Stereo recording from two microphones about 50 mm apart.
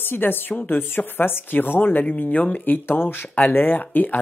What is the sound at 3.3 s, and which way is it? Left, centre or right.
Speech, left.